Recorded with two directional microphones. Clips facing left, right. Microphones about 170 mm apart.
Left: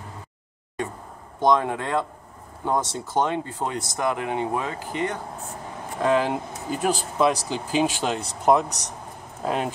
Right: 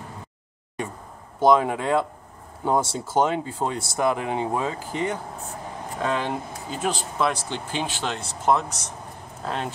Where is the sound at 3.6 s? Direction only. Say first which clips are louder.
Right 4 dB; 30° right (ahead or behind).